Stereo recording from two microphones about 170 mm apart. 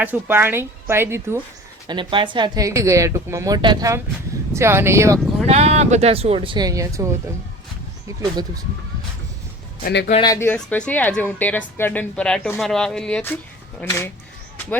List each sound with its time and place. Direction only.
0.0 s a woman's voice: 10° right (ahead or behind)
1.9 s a woman's voice: 30° right (ahead or behind)
5.1 s speech: centre (ahead or behind)
5.5 s speech: 40° right (ahead or behind); by 7.1 s 20° right (ahead or behind)
9.8 s a man's voice: 90° left
10.2 s a woman's voice: 20° left (ahead or behind)